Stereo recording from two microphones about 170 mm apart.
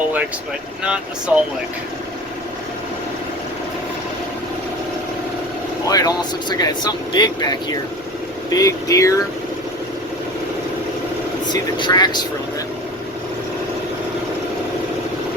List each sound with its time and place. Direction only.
1.3 s speech: 5° right (ahead or behind)
5.9 s speech: 20° left (ahead or behind)
11.4 s speech: 25° left (ahead or behind)